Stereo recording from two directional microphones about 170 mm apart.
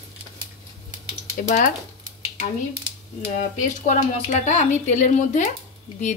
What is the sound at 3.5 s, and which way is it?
A woman's voice, 45° left (ahead or behind).